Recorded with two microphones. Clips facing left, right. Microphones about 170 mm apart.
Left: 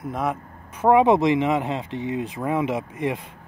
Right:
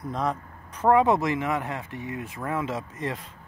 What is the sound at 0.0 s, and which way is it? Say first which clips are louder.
Speech: left 2 dB; 5° left (ahead or behind).